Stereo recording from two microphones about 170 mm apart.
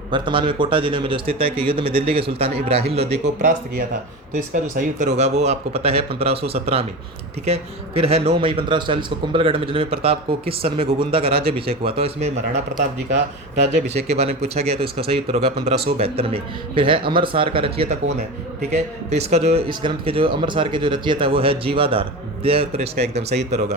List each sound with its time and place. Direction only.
0.1 s speech: 30° right (ahead or behind)
4.5 s speech: 50° right (ahead or behind)
13.8 s speech: 40° right (ahead or behind)